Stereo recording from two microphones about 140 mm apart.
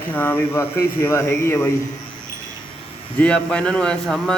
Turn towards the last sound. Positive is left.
turn(degrees=5)  # may be behind; listen again after turning